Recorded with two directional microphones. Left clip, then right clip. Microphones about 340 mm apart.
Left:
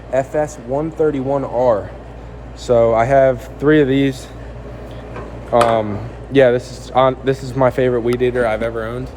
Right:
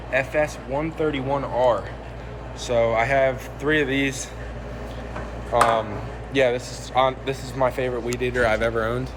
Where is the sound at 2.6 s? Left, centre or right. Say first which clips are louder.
Left 7 dB; left.